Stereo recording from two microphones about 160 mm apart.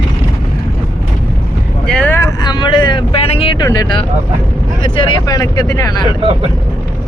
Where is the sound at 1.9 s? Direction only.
10° left (ahead or behind).